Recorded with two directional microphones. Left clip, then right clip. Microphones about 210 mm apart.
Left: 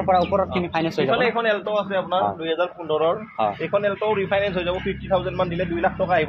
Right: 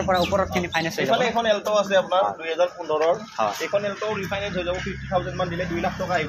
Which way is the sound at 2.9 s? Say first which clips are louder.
Even; 35° left (ahead or behind).